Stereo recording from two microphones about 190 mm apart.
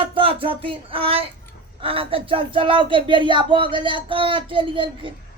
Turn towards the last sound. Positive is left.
turn(degrees=-25)  # may be behind; listen again after turning